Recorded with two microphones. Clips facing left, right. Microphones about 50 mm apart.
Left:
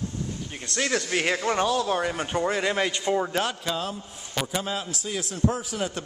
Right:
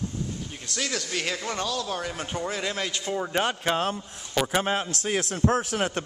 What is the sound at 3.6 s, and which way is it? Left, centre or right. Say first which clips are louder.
A man's voice: right 4 dB; right.